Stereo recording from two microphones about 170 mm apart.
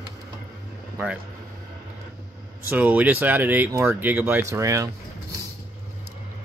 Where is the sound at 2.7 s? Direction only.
10° right (ahead or behind).